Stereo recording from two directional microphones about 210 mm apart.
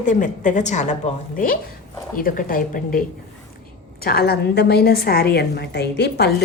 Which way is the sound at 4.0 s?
45° left (ahead or behind).